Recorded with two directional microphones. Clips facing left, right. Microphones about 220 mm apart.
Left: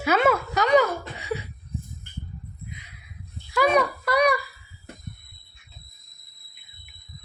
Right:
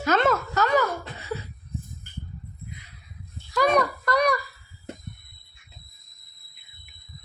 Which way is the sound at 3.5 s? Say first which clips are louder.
Left 1 dB; 5° left (ahead or behind).